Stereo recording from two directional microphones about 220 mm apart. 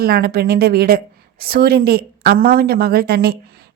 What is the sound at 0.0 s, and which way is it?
A woman's voice, 45° right (ahead or behind).